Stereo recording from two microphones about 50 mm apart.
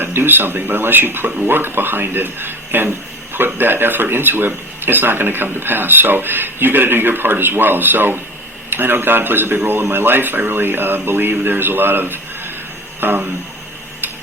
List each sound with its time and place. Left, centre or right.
0.0 s speech: right